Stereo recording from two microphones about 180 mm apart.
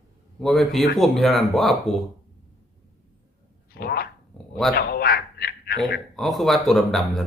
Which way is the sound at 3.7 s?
60° left (ahead or behind).